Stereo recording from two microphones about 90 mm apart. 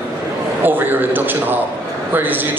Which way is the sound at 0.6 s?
20° right (ahead or behind).